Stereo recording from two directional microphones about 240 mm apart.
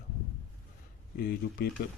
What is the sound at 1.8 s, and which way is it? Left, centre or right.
Speech, left.